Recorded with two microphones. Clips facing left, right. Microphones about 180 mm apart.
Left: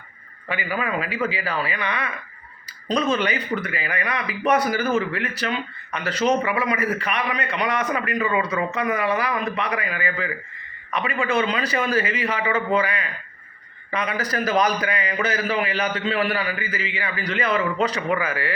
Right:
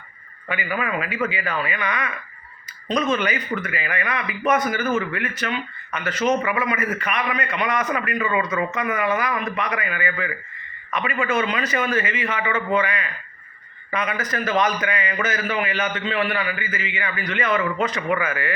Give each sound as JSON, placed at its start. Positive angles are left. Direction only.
{"t": 0.4, "sound": "speech", "side_deg": 30}